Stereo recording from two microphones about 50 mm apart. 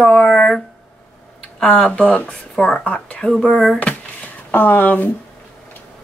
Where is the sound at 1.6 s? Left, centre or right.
Left.